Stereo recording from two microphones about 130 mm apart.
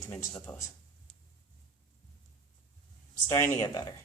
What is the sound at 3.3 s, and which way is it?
Speech, 25° left (ahead or behind).